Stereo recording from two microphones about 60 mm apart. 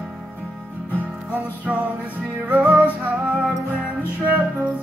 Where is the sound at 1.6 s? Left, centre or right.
Right.